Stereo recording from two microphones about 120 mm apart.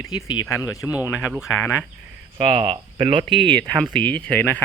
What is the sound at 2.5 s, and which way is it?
Speech, 60° right (ahead or behind).